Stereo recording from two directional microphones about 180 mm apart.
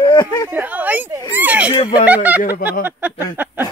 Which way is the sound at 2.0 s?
10° right (ahead or behind).